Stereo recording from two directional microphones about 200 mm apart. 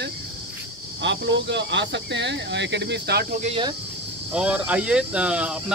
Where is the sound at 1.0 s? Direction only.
65° right (ahead or behind); by 3.5 s 45° right (ahead or behind).